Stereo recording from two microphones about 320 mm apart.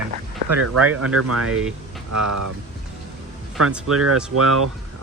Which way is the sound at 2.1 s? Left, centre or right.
Right.